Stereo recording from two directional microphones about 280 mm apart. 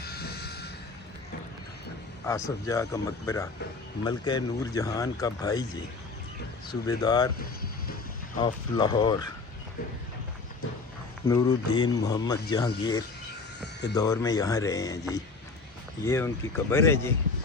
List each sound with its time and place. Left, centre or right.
0.0 s a sound: left
2.3 s speech: centre
6.7 s speech: centre
7.3 s music: left
8.4 s speech: centre
11.3 s speech: centre